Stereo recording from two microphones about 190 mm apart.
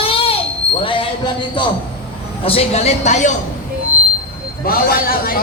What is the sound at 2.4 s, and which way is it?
Speech, 30° left (ahead or behind).